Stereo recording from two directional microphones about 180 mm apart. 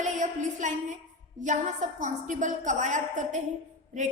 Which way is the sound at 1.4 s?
45° right (ahead or behind).